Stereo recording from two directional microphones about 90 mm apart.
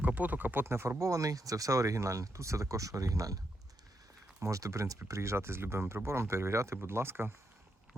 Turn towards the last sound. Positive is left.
turn(degrees=-25)  # may be behind; listen again after turning